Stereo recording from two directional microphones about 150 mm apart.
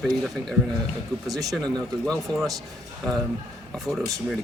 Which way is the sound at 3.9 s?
Centre (ahead or behind).